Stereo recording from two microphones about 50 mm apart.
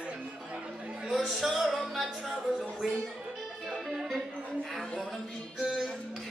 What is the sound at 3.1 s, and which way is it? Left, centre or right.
Music, centre.